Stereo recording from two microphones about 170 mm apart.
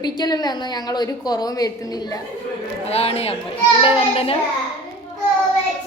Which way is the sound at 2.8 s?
35° left (ahead or behind).